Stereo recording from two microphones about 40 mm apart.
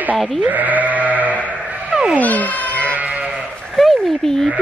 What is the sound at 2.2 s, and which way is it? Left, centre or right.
Cat, left.